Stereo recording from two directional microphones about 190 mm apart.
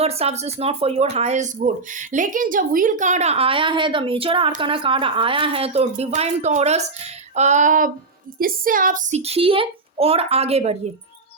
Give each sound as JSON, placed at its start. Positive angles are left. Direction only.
{"t": 0.0, "sound": "speech", "side_deg": -30}